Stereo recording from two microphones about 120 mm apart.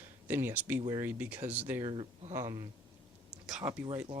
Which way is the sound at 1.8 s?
50° right (ahead or behind).